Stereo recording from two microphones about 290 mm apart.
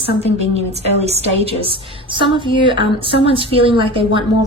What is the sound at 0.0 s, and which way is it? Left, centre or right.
A woman's voice, centre.